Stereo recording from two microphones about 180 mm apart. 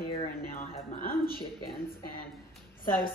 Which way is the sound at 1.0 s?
55° left (ahead or behind).